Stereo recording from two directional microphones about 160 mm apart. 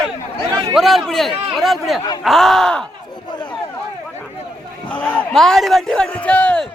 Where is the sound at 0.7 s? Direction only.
Centre (ahead or behind).